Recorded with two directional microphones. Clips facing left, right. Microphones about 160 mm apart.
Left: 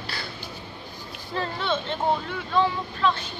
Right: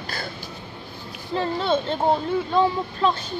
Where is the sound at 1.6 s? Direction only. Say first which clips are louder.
Right 4 dB; 40° right (ahead or behind).